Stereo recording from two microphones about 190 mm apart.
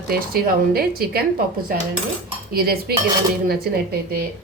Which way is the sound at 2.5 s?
50° right (ahead or behind).